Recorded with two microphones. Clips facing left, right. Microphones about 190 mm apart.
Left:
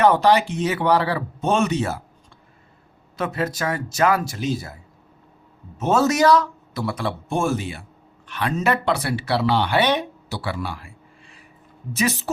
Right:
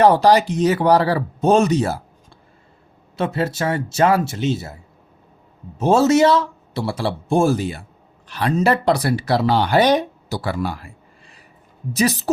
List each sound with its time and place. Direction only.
0.0 s speech: 35° right (ahead or behind)
3.2 s speech: 30° right (ahead or behind)